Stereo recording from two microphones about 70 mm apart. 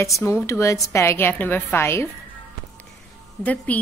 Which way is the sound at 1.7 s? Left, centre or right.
Left.